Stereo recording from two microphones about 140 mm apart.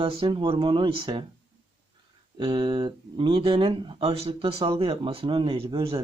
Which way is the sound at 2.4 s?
35° right (ahead or behind).